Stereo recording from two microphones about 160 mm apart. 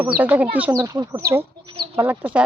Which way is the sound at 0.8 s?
25° right (ahead or behind).